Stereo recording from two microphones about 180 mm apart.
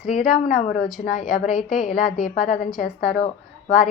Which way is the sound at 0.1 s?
50° left (ahead or behind).